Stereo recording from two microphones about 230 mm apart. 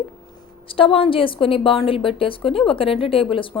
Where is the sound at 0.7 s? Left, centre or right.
Left.